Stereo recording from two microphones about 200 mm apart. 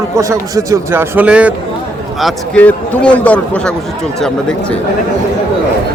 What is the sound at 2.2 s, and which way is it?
A man's voice, 5° left (ahead or behind).